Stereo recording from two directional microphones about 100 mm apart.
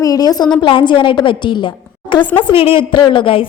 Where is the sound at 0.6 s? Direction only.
55° left (ahead or behind).